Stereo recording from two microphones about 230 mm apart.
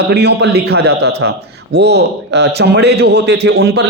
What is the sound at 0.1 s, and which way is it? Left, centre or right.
A man's voice, right.